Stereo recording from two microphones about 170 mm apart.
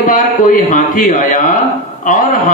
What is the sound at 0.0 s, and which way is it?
A man's voice, 50° left (ahead or behind).